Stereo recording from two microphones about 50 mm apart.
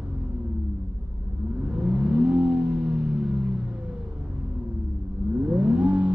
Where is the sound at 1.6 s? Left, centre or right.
Right.